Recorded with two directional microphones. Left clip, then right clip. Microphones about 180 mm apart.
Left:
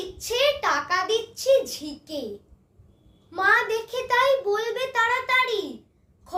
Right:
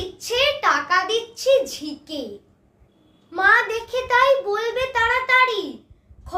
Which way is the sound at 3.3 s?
10° right (ahead or behind).